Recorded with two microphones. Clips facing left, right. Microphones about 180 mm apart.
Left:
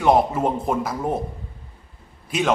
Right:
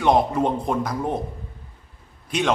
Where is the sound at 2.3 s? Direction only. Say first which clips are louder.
Even; 5° left (ahead or behind).